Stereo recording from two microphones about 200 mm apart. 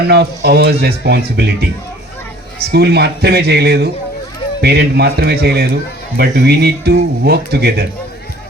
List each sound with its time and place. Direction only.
0.1 s speech: 55° right (ahead or behind)
2.7 s speech: 55° right (ahead or behind)